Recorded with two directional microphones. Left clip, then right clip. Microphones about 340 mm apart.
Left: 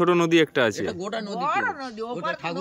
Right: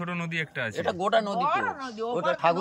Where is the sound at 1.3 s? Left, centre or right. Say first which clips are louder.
Left 1 dB; centre.